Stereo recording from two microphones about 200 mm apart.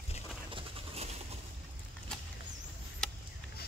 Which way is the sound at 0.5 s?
25° right (ahead or behind).